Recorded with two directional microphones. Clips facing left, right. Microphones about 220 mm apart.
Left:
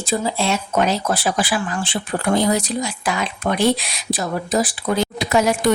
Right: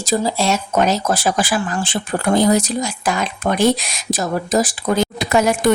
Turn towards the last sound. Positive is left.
turn(degrees=-50)  # may be behind; listen again after turning